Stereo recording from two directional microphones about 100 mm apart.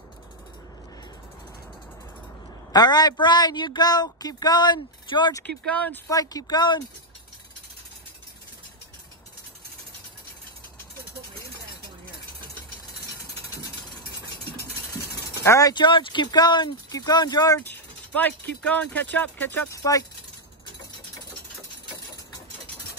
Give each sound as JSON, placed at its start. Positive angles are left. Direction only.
{"t": 2.7, "sound": "speech", "side_deg": 45}
{"t": 5.4, "sound": "speech", "side_deg": 15}
{"t": 6.0, "sound": "speech", "side_deg": 40}
{"t": 15.4, "sound": "speech", "side_deg": 30}
{"t": 15.7, "sound": "speech", "side_deg": 55}
{"t": 17.6, "sound": "speech", "side_deg": 15}
{"t": 19.7, "sound": "speech", "side_deg": 35}